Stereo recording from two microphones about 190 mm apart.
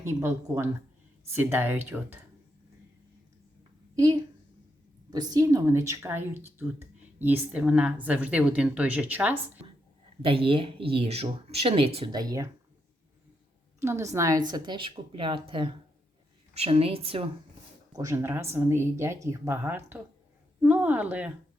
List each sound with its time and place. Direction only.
0.0 s a woman's voice: 15° right (ahead or behind)
3.9 s a woman's voice: 20° right (ahead or behind)
10.2 s a woman's voice: 30° right (ahead or behind)
13.7 s a woman's voice: 15° right (ahead or behind); by 17.2 s 30° right (ahead or behind)
17.9 s a woman's voice: 15° right (ahead or behind)